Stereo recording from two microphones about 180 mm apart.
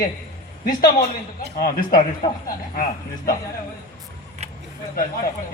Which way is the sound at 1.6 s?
50° left (ahead or behind).